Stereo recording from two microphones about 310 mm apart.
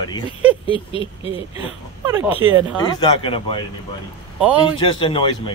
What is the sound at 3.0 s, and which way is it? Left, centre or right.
Speech, centre.